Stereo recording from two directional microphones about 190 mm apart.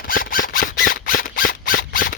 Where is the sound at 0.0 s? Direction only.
50° left (ahead or behind).